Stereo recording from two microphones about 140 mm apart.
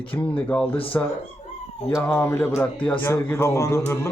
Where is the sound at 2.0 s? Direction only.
15° left (ahead or behind).